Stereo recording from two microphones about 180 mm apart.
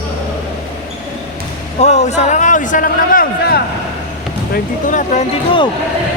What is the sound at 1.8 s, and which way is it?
A man's voice, 40° left (ahead or behind).